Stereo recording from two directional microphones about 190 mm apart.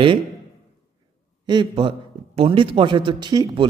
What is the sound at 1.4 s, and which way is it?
A woman's voice, 25° right (ahead or behind).